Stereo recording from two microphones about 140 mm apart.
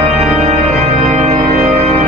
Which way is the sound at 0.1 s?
50° right (ahead or behind).